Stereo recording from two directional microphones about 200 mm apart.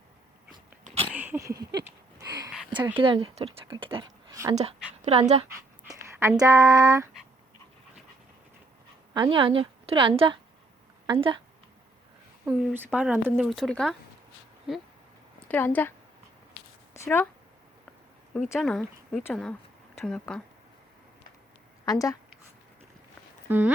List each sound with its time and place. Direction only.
1.0 s a sound: 10° right (ahead or behind)
3.0 s speech: 25° right (ahead or behind)
5.0 s speech: 35° right (ahead or behind)
5.9 s speech: 15° right (ahead or behind)
9.1 s a woman's voice: 25° right (ahead or behind)
12.5 s speech: 10° right (ahead or behind)
15.4 s a woman's voice: 10° left (ahead or behind)
16.9 s a sound: 15° left (ahead or behind)
18.5 s speech: centre (ahead or behind)
21.8 s a woman's voice: 15° left (ahead or behind)
23.5 s speech: 10° right (ahead or behind)